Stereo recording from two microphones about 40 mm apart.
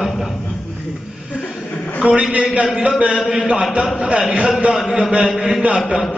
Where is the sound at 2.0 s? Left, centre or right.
Right.